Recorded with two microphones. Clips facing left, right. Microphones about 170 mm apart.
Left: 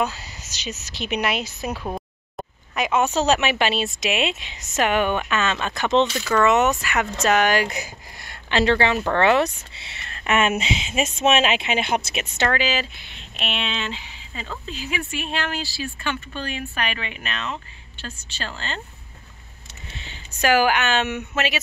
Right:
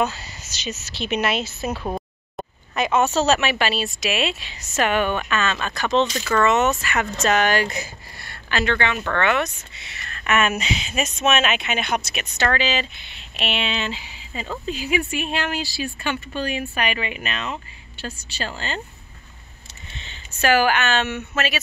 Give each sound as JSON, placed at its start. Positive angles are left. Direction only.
{"t": 0.0, "sound": "speech", "side_deg": 10}
{"t": 1.7, "sound": "a sound", "side_deg": 0}
{"t": 2.8, "sound": "speech", "side_deg": 10}
{"t": 6.1, "sound": "speech", "side_deg": 10}
{"t": 12.4, "sound": "speech", "side_deg": 10}
{"t": 20.0, "sound": "speech", "side_deg": 15}